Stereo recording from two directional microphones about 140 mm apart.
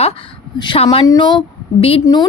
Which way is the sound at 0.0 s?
40° left (ahead or behind).